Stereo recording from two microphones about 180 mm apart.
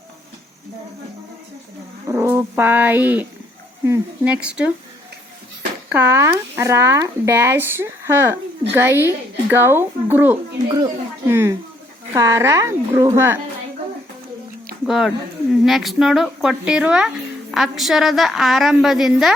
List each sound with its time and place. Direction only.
2.0 s speech: 15° right (ahead or behind)
5.9 s speech: 15° right (ahead or behind)
10.7 s speech: 20° right (ahead or behind)
14.8 s a woman's voice: centre (ahead or behind)